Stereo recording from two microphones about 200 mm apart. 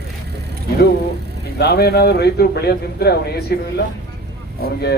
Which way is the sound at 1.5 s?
55° left (ahead or behind).